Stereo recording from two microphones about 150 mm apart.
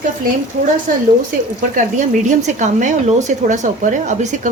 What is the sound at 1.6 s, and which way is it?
A woman's voice, 55° right (ahead or behind).